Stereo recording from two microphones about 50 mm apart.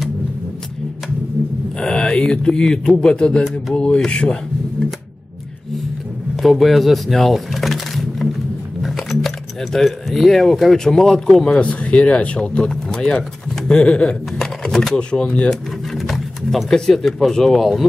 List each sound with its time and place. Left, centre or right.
1.8 s speech: centre
6.4 s a sound: centre
8.8 s speech: centre
11.5 s speech: left
14.4 s typing: centre
15.0 s speech: centre
16.7 s speech: centre